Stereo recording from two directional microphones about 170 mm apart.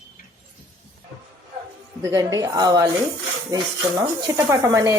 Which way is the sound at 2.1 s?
20° right (ahead or behind).